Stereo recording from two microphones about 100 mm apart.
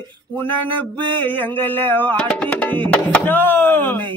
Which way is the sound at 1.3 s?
20° left (ahead or behind).